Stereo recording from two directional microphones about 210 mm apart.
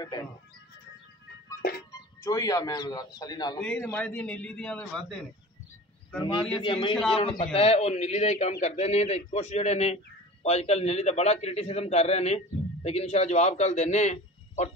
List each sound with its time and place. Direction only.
0.0 s a man's voice: 20° left (ahead or behind)
1.9 s a man's voice: 15° left (ahead or behind)
6.5 s a man's voice: 25° left (ahead or behind)